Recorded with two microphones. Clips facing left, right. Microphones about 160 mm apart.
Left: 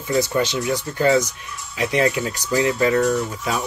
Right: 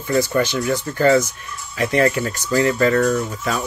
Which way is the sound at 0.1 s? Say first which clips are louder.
Right 2 dB; 15° left (ahead or behind).